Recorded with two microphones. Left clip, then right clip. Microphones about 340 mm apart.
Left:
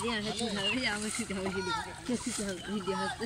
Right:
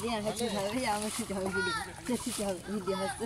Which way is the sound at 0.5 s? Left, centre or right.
Centre.